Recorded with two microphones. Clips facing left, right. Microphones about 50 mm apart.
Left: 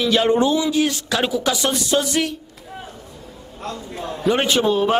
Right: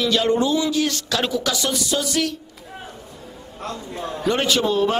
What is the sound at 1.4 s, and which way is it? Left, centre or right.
Speech, left.